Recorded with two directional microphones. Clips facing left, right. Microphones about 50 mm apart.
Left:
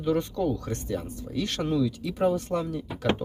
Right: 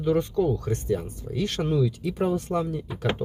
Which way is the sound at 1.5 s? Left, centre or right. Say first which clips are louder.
Right 1 dB; centre.